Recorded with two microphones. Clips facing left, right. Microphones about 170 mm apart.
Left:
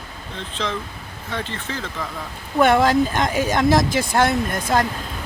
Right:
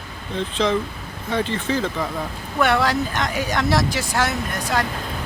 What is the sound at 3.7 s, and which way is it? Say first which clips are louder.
Speech: left 3 dB; 45° left (ahead or behind).